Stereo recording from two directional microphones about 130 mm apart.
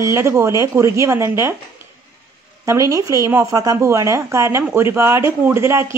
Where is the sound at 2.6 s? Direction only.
25° right (ahead or behind).